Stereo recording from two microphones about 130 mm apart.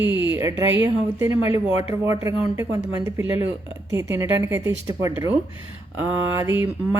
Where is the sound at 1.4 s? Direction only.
50° left (ahead or behind).